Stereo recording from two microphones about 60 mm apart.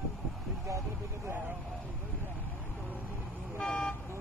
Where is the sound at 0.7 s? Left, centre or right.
Right.